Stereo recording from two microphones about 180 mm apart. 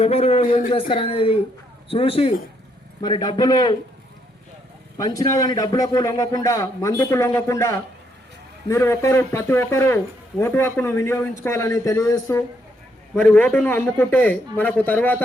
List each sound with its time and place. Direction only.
0.0 s a man's voice: 35° left (ahead or behind)
4.9 s a man's voice: 20° left (ahead or behind)
13.1 s speech: 10° left (ahead or behind)